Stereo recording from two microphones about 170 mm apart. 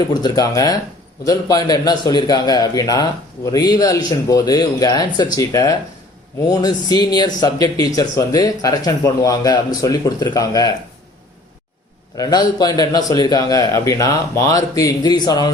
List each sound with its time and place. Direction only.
0.1 s a man's voice: 20° left (ahead or behind)
12.1 s a man's voice: 25° left (ahead or behind)